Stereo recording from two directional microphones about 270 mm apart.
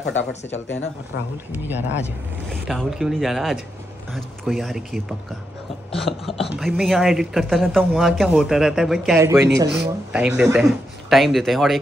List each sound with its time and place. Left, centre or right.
0.0 s speech: left
1.5 s speech: centre